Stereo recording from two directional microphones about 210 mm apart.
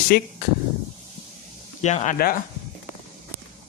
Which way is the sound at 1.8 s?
35° left (ahead or behind).